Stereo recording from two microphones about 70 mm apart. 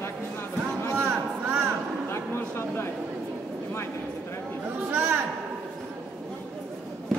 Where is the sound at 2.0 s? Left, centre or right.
Left.